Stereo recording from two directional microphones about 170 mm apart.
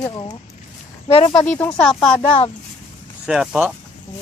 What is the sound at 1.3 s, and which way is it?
Speech, 5° left (ahead or behind).